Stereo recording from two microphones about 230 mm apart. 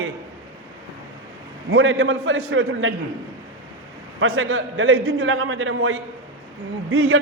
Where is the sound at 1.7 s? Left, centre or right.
Right.